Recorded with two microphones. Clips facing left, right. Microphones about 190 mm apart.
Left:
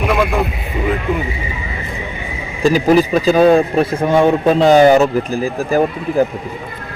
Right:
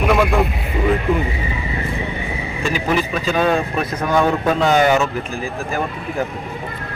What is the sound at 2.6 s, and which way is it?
Speech, 35° left (ahead or behind).